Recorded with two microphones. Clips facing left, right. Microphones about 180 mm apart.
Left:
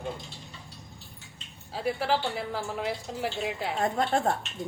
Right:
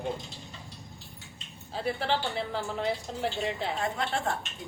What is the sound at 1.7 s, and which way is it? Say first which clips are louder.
Speech: left 2 dB; 10° left (ahead or behind).